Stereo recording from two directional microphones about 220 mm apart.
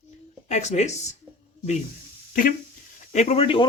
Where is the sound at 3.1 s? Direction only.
30° left (ahead or behind).